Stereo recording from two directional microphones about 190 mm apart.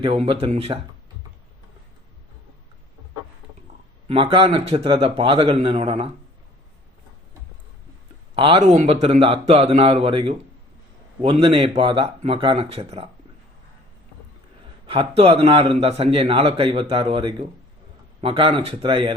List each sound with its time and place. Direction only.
0.0 s a man's voice: 30° right (ahead or behind)
4.1 s speech: 30° right (ahead or behind)
8.4 s a man's voice: 30° right (ahead or behind)
14.8 s a man's voice: 30° right (ahead or behind)